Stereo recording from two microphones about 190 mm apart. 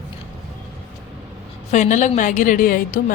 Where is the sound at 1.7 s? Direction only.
40° left (ahead or behind).